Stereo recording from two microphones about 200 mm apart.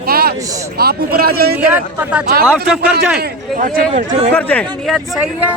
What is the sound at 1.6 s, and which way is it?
Speech, 5° right (ahead or behind).